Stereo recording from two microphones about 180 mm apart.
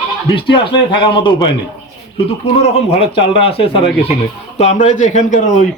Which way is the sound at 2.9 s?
30° left (ahead or behind).